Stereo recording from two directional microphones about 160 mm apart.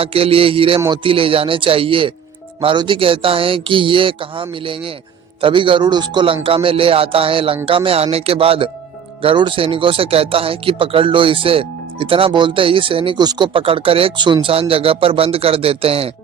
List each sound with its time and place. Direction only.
0.0 s speech: 35° right (ahead or behind)